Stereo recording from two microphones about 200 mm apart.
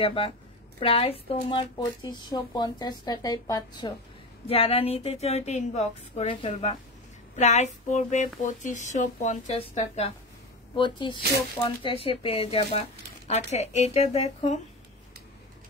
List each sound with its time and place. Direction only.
0.0 s speech: 30° left (ahead or behind)
4.5 s speech: 30° left (ahead or behind)